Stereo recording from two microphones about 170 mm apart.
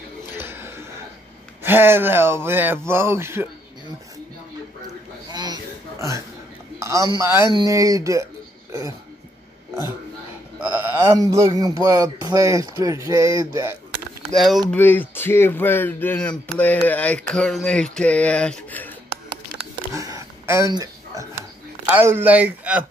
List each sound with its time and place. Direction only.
0.3 s a sound: 15° right (ahead or behind)
1.6 s speech: 10° right (ahead or behind)
5.3 s a sound: 25° right (ahead or behind)
6.8 s speech: 20° right (ahead or behind)
10.6 s speech: 10° right (ahead or behind)
14.3 s speech: centre (ahead or behind)
14.8 s speech: 10° left (ahead or behind)
19.9 s a sound: 20° right (ahead or behind)
21.9 s speech: 10° right (ahead or behind)